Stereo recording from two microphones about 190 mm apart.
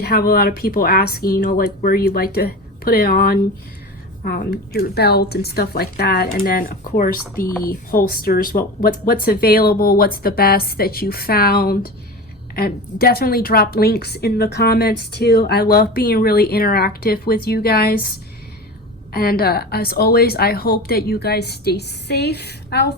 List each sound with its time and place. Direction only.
0.0 s a woman's voice: 55° left (ahead or behind)
19.1 s a woman's voice: 55° left (ahead or behind)